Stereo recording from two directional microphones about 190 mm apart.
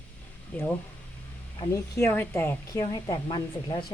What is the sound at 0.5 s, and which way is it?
Speech, 5° left (ahead or behind).